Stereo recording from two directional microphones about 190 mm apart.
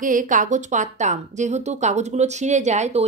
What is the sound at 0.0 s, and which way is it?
A woman's voice, 45° right (ahead or behind).